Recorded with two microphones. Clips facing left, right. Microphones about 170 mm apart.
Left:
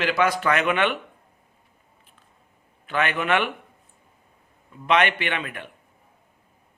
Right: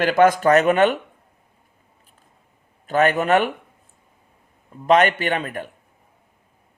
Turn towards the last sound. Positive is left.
turn(degrees=-40)  # may be behind; listen again after turning